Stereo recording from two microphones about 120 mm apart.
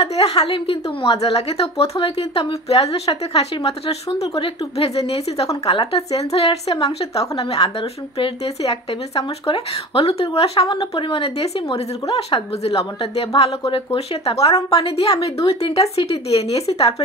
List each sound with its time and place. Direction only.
0.1 s a woman's voice: 60° left (ahead or behind)